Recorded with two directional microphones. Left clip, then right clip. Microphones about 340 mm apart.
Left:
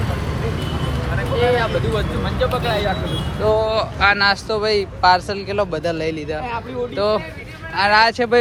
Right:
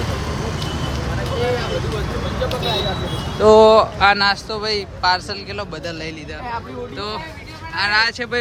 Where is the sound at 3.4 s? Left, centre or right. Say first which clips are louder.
Right 8 dB; right.